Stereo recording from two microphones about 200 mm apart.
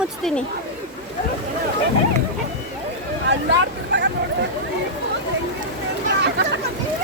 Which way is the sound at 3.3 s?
60° right (ahead or behind).